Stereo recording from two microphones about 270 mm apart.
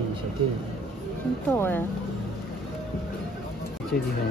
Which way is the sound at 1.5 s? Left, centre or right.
Centre.